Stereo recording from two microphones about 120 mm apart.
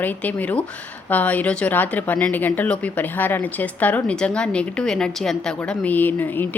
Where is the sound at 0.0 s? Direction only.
15° left (ahead or behind).